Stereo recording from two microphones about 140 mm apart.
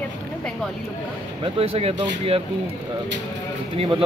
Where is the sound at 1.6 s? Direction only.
45° right (ahead or behind).